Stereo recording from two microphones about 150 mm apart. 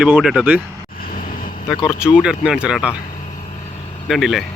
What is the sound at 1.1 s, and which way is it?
Vehicle, 70° left (ahead or behind).